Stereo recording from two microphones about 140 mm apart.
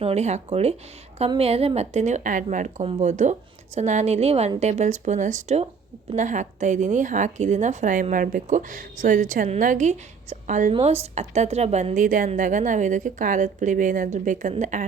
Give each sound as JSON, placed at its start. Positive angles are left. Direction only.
{"t": 0.0, "sound": "a woman's voice", "side_deg": -50}
{"t": 8.1, "sound": "a woman's voice", "side_deg": -80}
{"t": 10.7, "sound": "a woman's voice", "side_deg": -45}